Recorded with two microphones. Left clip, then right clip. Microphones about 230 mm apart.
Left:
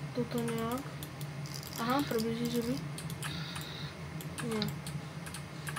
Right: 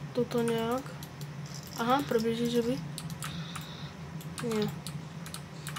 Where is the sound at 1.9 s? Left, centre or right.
Right.